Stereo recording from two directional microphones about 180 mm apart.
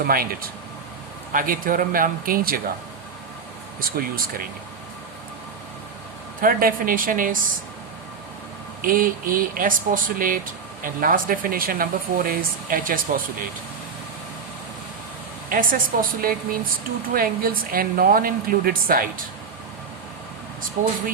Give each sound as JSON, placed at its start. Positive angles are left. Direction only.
{"t": 0.0, "sound": "speech", "side_deg": -55}
{"t": 6.4, "sound": "speech", "side_deg": -55}
{"t": 8.8, "sound": "speech", "side_deg": -50}
{"t": 15.4, "sound": "speech", "side_deg": -50}
{"t": 20.8, "sound": "speech", "side_deg": -45}